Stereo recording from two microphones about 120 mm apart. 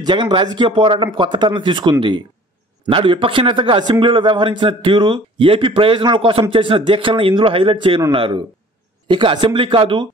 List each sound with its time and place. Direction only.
0.0 s a man's voice: 40° right (ahead or behind)